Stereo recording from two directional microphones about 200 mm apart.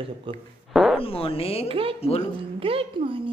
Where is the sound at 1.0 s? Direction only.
30° left (ahead or behind).